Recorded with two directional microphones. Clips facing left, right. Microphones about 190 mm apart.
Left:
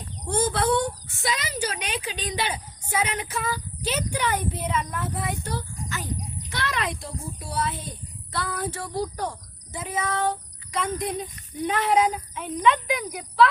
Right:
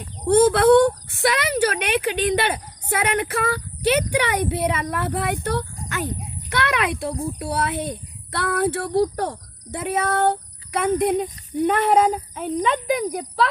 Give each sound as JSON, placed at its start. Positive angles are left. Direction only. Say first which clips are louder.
{"t": 0.3, "sound": "speech", "louder": "right 10 dB", "side_deg": -60}